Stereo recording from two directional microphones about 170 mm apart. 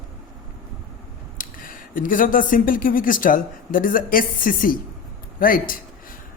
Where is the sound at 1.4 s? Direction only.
55° left (ahead or behind).